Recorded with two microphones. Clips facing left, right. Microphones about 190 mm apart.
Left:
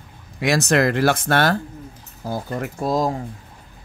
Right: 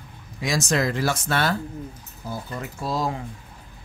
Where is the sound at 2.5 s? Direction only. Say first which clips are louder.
Left 7 dB; 45° left (ahead or behind).